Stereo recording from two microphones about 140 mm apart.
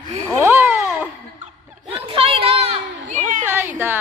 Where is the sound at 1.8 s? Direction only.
40° right (ahead or behind).